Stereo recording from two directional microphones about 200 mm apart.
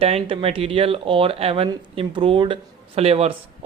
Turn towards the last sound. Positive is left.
turn(degrees=-30)  # may be behind; listen again after turning